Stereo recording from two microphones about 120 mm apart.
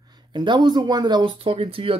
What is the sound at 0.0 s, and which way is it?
Speech, 35° right (ahead or behind).